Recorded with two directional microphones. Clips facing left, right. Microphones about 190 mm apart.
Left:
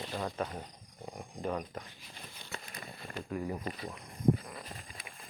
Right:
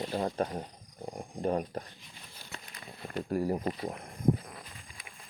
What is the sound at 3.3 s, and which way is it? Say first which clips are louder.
Speech: right 6 dB; 40° right (ahead or behind).